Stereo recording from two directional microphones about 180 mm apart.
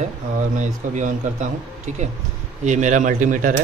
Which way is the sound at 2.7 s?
40° right (ahead or behind).